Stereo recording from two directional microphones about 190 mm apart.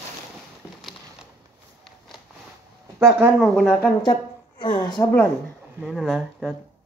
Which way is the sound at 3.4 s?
5° left (ahead or behind).